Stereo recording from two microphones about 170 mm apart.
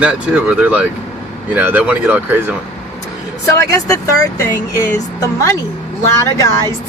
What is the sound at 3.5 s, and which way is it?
Speech, 20° left (ahead or behind).